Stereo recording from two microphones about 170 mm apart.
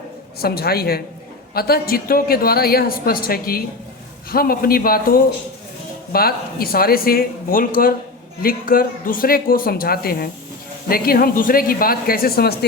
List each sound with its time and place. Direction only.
0.3 s a woman's voice: 65° left (ahead or behind)